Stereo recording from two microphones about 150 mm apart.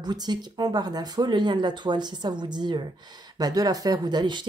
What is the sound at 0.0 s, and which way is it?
Speech, 30° right (ahead or behind).